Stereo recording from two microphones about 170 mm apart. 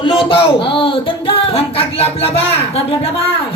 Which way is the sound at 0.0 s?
30° left (ahead or behind).